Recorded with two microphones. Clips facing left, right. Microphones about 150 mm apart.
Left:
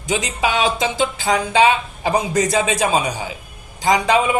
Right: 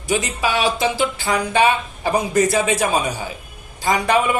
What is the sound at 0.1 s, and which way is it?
A man's voice, 20° left (ahead or behind).